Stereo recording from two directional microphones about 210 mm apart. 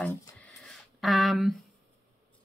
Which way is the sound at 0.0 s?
15° left (ahead or behind).